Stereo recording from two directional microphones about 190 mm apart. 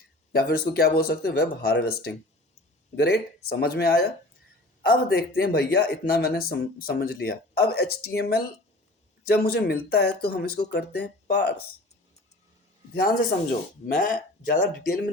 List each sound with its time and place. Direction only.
0.3 s speech: 55° left (ahead or behind)
12.9 s speech: 55° left (ahead or behind)